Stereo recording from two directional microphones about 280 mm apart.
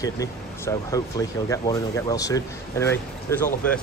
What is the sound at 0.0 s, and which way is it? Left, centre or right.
Speech, centre.